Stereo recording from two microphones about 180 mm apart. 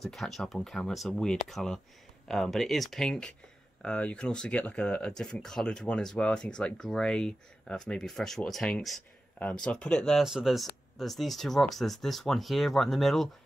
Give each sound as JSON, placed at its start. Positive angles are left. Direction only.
{"t": 0.0, "sound": "speech", "side_deg": 0}